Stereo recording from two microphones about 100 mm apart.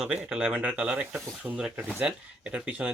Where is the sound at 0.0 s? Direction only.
5° right (ahead or behind).